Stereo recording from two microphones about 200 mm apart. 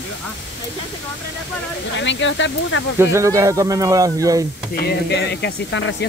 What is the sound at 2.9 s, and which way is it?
A man's voice, 15° right (ahead or behind).